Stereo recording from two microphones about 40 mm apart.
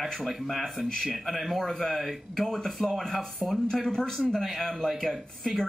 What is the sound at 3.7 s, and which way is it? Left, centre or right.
Speech, centre.